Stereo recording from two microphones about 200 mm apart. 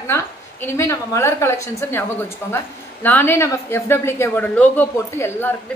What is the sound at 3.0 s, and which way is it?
A woman's voice, 10° left (ahead or behind).